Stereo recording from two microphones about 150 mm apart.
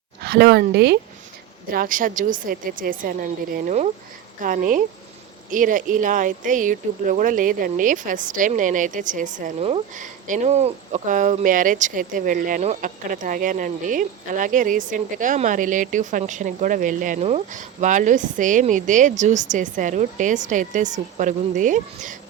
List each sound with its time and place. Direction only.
0.2 s speech: 90° right
1.7 s a woman's voice: 65° right (ahead or behind)